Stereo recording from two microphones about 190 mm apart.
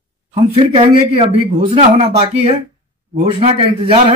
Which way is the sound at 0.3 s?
30° right (ahead or behind).